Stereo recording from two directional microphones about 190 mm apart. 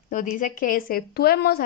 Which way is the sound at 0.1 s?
45° left (ahead or behind).